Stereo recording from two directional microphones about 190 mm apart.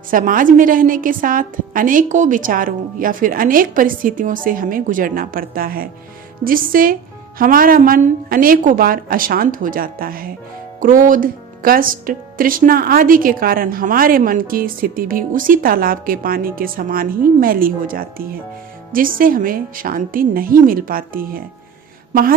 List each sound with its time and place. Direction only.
0.1 s speech: 45° right (ahead or behind)